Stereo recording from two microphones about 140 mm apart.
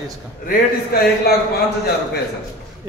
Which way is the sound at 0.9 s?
90° left.